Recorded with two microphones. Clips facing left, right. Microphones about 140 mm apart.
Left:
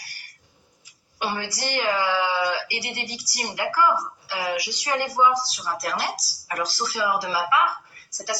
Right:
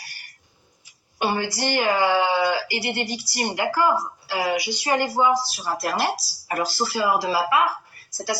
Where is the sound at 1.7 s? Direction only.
55° right (ahead or behind).